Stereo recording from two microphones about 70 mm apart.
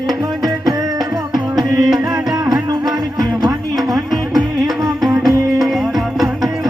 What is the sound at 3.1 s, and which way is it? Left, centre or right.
Music, right.